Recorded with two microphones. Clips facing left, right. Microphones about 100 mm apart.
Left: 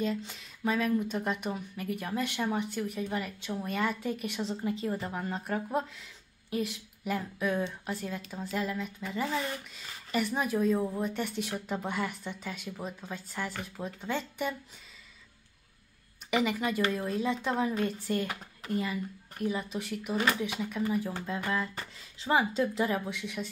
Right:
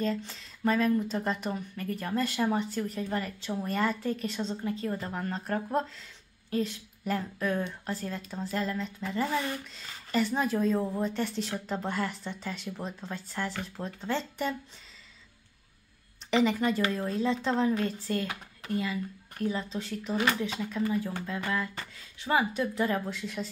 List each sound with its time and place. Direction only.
0.0 s speech: 5° left (ahead or behind)
2.3 s a woman's voice: 5° right (ahead or behind); by 5.0 s 20° left (ahead or behind)
5.0 s speech: 10° left (ahead or behind)
16.3 s speech: 10° left (ahead or behind)
19.3 s speech: 10° left (ahead or behind)
22.9 s speech: 5° left (ahead or behind)